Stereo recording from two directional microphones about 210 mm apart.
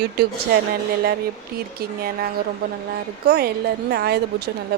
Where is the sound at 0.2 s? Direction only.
50° right (ahead or behind).